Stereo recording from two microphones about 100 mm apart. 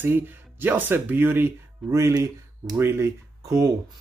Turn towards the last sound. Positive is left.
turn(degrees=-25)  # may be behind; listen again after turning